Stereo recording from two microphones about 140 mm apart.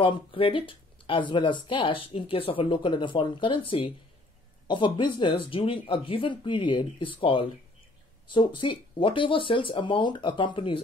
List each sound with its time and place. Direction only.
0.0 s speech: 35° left (ahead or behind)